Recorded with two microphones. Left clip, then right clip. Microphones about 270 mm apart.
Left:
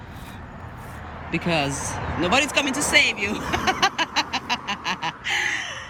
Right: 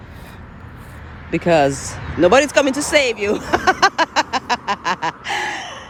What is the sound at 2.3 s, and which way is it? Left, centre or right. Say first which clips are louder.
Speech: right 8 dB; right.